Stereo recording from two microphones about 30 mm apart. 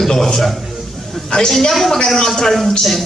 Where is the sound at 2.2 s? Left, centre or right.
Centre.